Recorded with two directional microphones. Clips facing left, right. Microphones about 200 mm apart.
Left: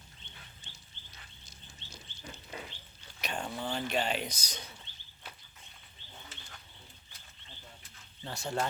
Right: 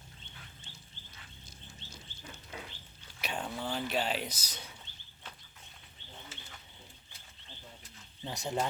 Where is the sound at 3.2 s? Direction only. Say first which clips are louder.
Even; 5° right (ahead or behind).